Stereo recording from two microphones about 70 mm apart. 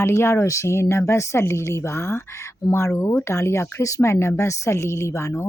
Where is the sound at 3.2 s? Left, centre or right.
Left.